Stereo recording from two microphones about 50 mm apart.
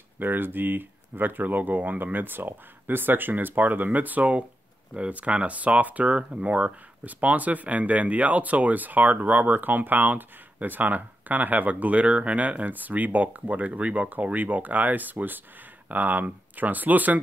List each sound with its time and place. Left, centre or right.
0.2 s speech: right